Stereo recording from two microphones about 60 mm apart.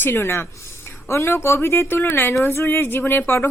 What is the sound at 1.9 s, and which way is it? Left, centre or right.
A woman's voice, left.